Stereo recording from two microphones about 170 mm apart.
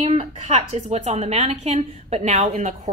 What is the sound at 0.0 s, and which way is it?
A woman's voice, 40° right (ahead or behind).